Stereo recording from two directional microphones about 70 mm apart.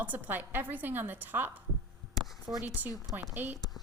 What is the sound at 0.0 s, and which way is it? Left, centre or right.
A woman's voice, right.